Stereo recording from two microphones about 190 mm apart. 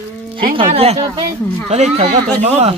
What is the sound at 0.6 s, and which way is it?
Speech, 30° right (ahead or behind).